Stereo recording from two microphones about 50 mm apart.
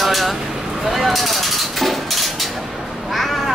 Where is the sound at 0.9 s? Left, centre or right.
Centre.